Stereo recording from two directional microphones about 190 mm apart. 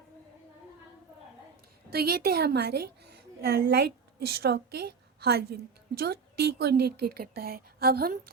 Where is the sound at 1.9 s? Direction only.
55° right (ahead or behind).